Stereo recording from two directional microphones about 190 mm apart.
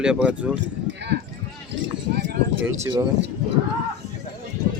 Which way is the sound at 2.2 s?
60° right (ahead or behind).